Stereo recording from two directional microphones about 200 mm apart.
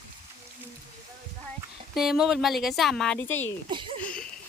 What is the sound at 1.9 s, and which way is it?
Speech, centre (ahead or behind).